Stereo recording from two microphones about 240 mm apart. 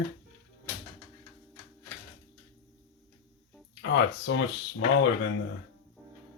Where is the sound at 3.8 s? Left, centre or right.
Left.